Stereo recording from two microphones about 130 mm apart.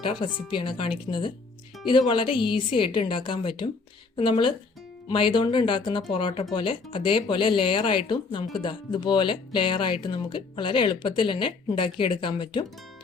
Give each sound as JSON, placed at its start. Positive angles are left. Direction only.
{"t": 0.0, "sound": "speech", "side_deg": 40}